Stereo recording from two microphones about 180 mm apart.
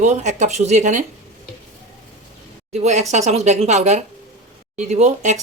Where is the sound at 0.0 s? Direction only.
40° right (ahead or behind).